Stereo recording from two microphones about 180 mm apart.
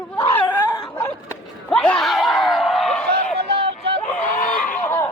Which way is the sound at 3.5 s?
30° right (ahead or behind).